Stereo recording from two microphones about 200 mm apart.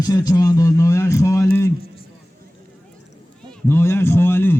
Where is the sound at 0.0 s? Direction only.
15° left (ahead or behind).